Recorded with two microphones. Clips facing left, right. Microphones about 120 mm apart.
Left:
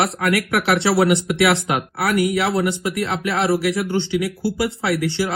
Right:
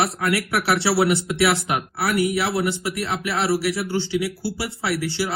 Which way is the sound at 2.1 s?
30° right (ahead or behind).